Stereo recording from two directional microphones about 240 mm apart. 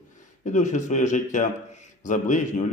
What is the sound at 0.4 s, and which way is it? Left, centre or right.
Speech, left.